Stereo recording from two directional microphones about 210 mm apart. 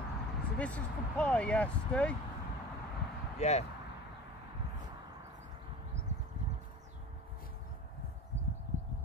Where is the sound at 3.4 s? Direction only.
30° left (ahead or behind).